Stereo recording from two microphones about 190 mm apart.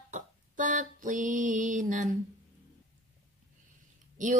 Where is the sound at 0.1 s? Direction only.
40° right (ahead or behind).